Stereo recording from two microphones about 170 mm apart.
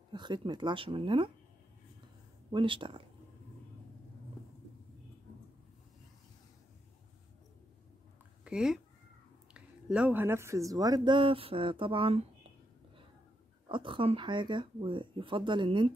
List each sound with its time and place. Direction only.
0.1 s speech: 25° right (ahead or behind)
2.5 s speech: 30° right (ahead or behind)
8.5 s speech: 5° right (ahead or behind); by 12.3 s 35° right (ahead or behind)
13.7 s speech: 30° right (ahead or behind)